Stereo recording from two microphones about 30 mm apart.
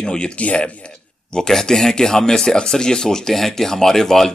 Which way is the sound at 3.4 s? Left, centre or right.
Centre.